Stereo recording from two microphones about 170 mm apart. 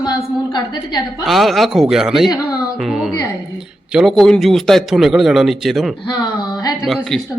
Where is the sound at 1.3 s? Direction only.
Centre (ahead or behind).